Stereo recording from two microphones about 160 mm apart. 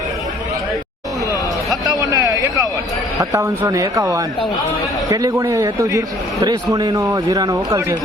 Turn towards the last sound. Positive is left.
turn(degrees=-20)  # may be behind; listen again after turning